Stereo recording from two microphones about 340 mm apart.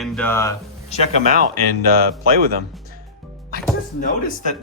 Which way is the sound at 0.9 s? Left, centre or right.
Centre.